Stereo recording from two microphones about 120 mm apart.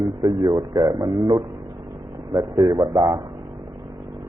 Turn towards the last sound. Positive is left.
turn(degrees=-40)  # may be behind; listen again after turning